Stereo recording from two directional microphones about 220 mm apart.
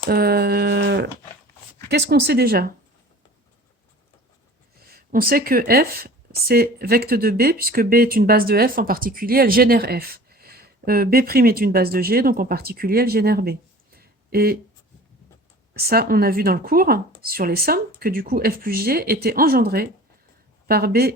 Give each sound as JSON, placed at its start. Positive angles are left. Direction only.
{"t": 0.0, "sound": "a sound", "side_deg": -45}
{"t": 1.9, "sound": "speech", "side_deg": -50}
{"t": 4.9, "sound": "speech", "side_deg": -40}
{"t": 15.7, "sound": "speech", "side_deg": -45}